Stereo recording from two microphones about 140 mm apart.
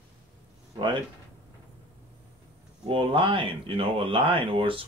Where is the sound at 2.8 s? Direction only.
40° right (ahead or behind).